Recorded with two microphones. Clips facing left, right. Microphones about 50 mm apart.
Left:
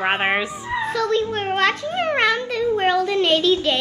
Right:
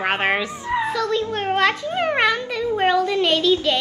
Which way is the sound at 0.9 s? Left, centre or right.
Centre.